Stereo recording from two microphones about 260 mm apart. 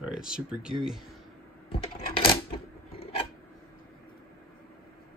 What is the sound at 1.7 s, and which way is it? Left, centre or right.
Sewing machine, left.